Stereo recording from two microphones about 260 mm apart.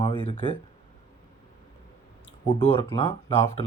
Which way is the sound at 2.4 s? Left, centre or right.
Left.